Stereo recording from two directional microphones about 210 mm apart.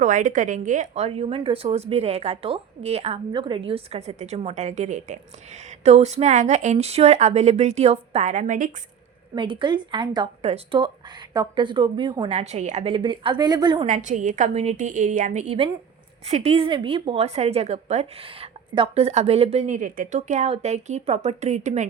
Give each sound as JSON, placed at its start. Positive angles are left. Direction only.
{"t": 0.0, "sound": "a woman's voice", "side_deg": -35}
{"t": 9.3, "sound": "a woman's voice", "side_deg": -25}
{"t": 13.8, "sound": "a woman's voice", "side_deg": -35}